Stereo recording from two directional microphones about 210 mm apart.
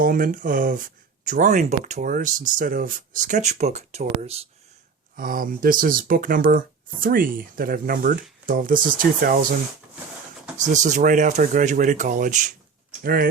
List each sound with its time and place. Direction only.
0.0 s speech: 40° right (ahead or behind)
5.1 s speech: 40° right (ahead or behind)
10.6 s speech: 35° right (ahead or behind)